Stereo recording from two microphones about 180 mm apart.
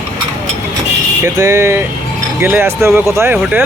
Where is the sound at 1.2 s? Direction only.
15° right (ahead or behind).